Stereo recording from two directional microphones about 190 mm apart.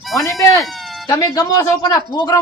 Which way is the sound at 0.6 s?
Centre (ahead or behind).